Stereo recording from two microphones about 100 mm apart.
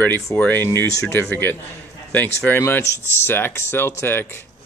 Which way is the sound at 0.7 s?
30° left (ahead or behind).